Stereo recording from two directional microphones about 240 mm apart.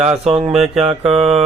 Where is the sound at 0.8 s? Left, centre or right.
Right.